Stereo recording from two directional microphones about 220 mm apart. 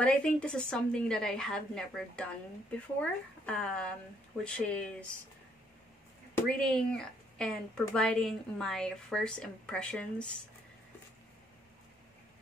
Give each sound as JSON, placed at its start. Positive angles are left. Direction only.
{"t": 0.0, "sound": "speech", "side_deg": 5}
{"t": 6.3, "sound": "speech", "side_deg": 5}